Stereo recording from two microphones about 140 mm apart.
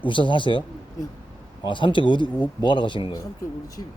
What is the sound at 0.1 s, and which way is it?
Speech, 35° left (ahead or behind).